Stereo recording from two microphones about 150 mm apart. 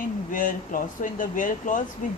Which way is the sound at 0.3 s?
65° left (ahead or behind).